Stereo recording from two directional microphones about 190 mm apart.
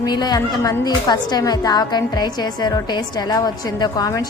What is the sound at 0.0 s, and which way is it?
A woman's voice, 20° left (ahead or behind).